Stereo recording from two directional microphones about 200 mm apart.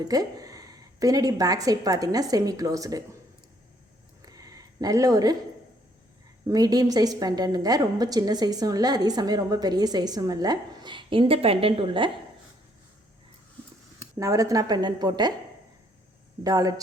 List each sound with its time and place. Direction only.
0.0 s a woman's voice: 20° right (ahead or behind)
4.2 s a sound: 20° right (ahead or behind)
6.5 s a woman's voice: 20° right (ahead or behind)
14.2 s a woman's voice: 15° right (ahead or behind)
16.4 s a woman's voice: 20° right (ahead or behind)